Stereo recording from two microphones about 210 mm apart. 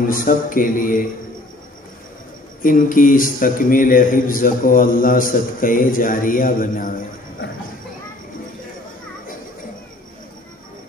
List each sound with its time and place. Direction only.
0.1 s a man's voice: 40° left (ahead or behind)
2.6 s a man's voice: 40° left (ahead or behind)